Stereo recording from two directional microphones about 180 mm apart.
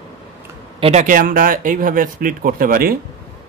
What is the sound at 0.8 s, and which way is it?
Speech, 40° right (ahead or behind).